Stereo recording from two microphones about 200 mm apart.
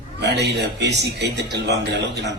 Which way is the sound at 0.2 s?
55° right (ahead or behind).